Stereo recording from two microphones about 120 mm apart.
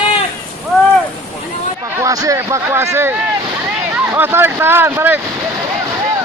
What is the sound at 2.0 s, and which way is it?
Speech, 25° right (ahead or behind).